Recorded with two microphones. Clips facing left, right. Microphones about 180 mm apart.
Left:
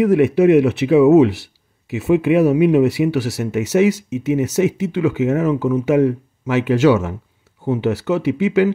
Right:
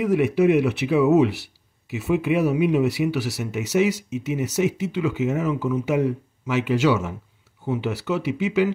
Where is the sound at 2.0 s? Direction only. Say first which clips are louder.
Left 7 dB; 55° left (ahead or behind).